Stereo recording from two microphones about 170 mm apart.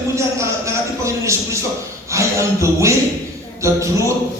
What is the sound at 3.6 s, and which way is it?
Speech, 15° right (ahead or behind).